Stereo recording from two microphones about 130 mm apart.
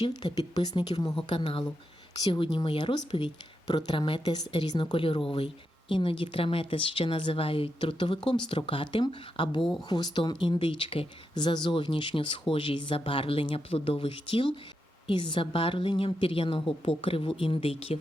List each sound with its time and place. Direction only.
0.0 s a woman's voice: 35° left (ahead or behind)